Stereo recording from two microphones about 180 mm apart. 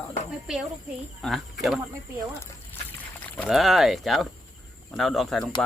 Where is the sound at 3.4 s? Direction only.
Centre (ahead or behind).